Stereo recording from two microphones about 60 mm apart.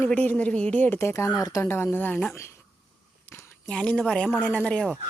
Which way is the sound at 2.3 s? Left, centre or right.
Left.